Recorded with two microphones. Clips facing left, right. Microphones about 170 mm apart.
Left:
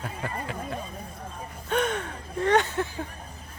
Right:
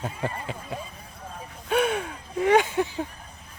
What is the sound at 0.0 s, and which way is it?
Speech, 20° right (ahead or behind).